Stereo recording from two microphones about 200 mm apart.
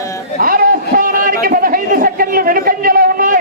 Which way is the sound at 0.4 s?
45° right (ahead or behind).